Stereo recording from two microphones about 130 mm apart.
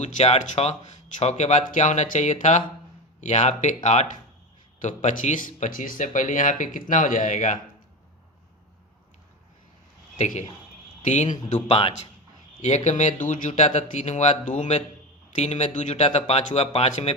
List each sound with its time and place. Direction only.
0.0 s speech: 60° left (ahead or behind)
4.8 s speech: 70° left (ahead or behind)
10.2 s a man's voice: 65° left (ahead or behind)
11.7 s speech: 45° left (ahead or behind)
12.6 s speech: 65° left (ahead or behind)
16.0 s speech: 55° left (ahead or behind)